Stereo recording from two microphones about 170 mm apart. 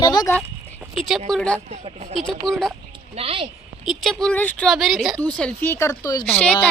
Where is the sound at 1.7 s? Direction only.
40° right (ahead or behind).